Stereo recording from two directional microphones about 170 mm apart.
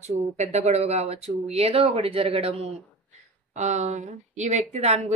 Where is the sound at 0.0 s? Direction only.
40° right (ahead or behind).